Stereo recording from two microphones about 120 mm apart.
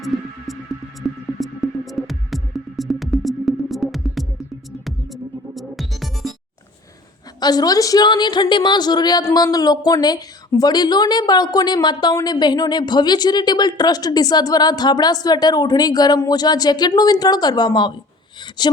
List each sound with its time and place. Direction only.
1.0 s music: centre (ahead or behind)
7.3 s a woman's voice: 35° left (ahead or behind)